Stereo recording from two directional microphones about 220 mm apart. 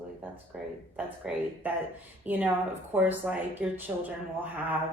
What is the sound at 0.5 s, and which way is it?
Speech, 5° right (ahead or behind).